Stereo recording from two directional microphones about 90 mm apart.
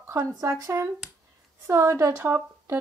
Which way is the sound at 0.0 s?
35° right (ahead or behind).